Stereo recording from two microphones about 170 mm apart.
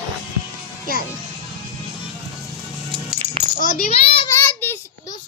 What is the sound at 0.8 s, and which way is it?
Speech, 60° left (ahead or behind).